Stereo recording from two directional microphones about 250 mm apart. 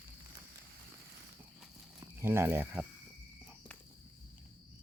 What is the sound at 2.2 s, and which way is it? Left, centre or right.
Speech, centre.